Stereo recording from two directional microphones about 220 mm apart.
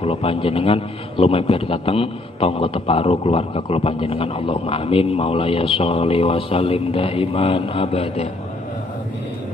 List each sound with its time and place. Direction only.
0.0 s a man's voice: 25° left (ahead or behind)